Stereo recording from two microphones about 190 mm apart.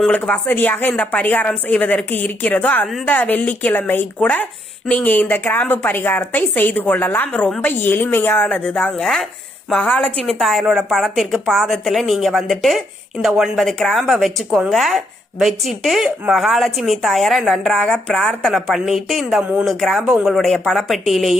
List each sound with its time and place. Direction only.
0.0 s a woman's voice: 5° left (ahead or behind)